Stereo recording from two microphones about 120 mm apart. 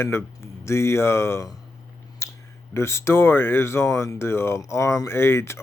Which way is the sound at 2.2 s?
25° left (ahead or behind).